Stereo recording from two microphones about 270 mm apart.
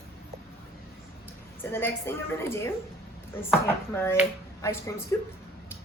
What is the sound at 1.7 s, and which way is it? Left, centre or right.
A woman's voice, centre.